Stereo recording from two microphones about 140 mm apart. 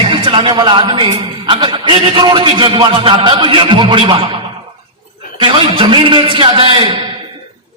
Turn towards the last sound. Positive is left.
turn(degrees=-40)  # may be behind; listen again after turning